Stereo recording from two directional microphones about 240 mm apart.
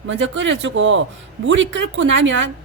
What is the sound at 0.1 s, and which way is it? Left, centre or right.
A woman's voice, right.